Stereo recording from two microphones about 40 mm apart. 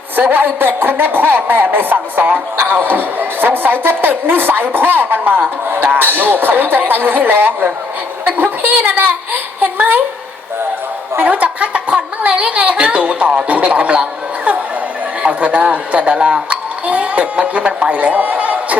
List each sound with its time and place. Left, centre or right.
0.2 s a woman's voice: right
11.3 s a woman's voice: right
15.2 s a child's voice: right